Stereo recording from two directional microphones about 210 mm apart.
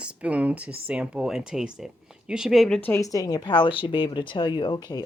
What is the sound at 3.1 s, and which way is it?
Speech, 20° left (ahead or behind).